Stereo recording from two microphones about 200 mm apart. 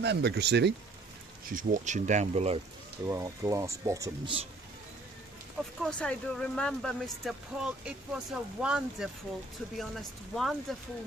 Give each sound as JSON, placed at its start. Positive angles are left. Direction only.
{"t": 0.0, "sound": "speech", "side_deg": -55}
{"t": 1.5, "sound": "speech", "side_deg": -40}
{"t": 3.1, "sound": "speech", "side_deg": -15}
{"t": 5.8, "sound": "speech", "side_deg": 5}